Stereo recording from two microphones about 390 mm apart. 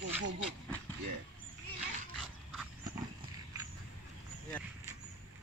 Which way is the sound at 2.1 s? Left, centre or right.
Centre.